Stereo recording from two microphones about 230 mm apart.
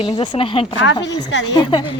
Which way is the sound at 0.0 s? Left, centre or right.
Left.